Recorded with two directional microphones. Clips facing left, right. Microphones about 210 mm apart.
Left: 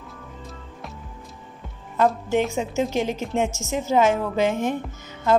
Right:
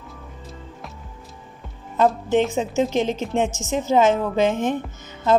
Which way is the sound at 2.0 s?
20° right (ahead or behind).